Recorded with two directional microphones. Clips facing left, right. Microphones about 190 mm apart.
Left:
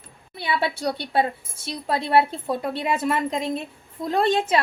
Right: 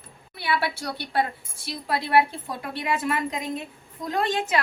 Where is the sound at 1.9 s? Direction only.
25° left (ahead or behind).